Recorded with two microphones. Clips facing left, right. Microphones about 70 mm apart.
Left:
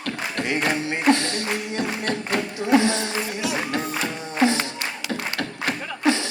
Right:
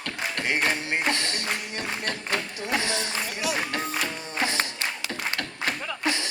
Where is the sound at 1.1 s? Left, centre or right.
Left.